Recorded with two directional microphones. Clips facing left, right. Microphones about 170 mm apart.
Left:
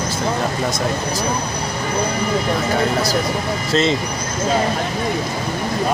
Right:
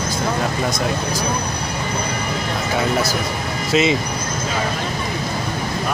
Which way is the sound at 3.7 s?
10° right (ahead or behind).